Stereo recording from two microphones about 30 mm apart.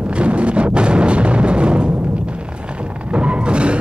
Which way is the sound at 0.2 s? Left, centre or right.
Right.